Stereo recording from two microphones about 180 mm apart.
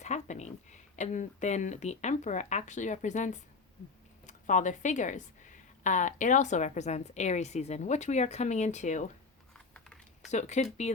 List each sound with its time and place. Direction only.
0.0 s speech: 40° left (ahead or behind)
9.7 s typing: 5° left (ahead or behind)
10.3 s speech: 40° left (ahead or behind)